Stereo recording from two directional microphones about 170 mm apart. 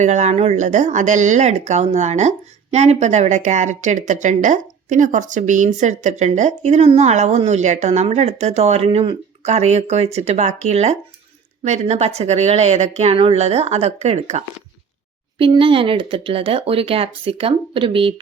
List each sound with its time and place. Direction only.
0.0 s speech: 45° right (ahead or behind)